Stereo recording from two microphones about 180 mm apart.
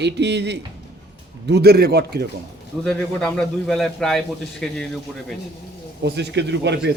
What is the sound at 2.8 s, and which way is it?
A man's voice, 5° left (ahead or behind).